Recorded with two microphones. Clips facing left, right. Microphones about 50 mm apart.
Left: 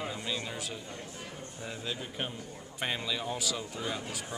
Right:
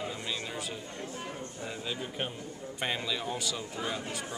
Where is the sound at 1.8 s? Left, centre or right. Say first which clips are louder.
Right 1 dB; centre.